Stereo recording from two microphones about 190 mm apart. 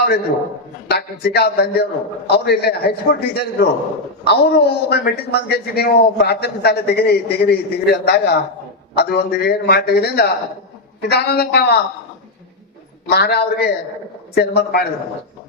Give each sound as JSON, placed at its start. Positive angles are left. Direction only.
{"t": 0.9, "sound": "a man's voice", "side_deg": 55}
{"t": 13.1, "sound": "a man's voice", "side_deg": 55}